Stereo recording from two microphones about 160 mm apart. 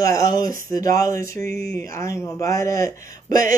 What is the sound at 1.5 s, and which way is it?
Speech, 90° left.